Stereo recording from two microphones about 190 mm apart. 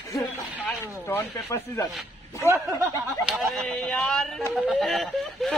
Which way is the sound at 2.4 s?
15° right (ahead or behind).